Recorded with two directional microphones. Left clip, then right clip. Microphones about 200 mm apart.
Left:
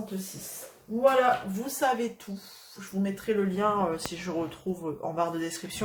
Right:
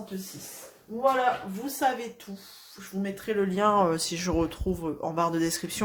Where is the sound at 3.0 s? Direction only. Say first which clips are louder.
Even; 30° right (ahead or behind).